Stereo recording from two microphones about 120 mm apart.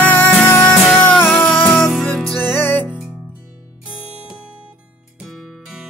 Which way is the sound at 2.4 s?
15° left (ahead or behind).